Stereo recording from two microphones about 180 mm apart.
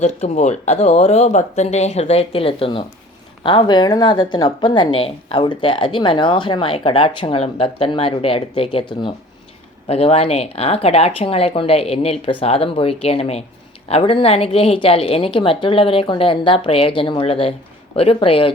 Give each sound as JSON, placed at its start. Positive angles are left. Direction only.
{"t": 0.0, "sound": "a woman's voice", "side_deg": 40}